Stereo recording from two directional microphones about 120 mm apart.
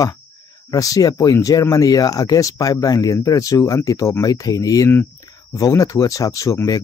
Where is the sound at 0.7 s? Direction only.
30° left (ahead or behind).